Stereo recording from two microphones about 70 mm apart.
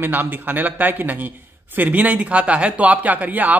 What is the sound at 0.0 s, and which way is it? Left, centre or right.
Speech, right.